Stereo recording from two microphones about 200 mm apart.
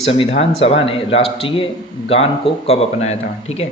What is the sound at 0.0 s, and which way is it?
A man's voice, 30° left (ahead or behind).